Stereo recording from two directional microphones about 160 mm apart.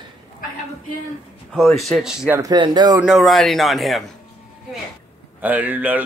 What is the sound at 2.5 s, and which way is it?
Speech, 30° right (ahead or behind).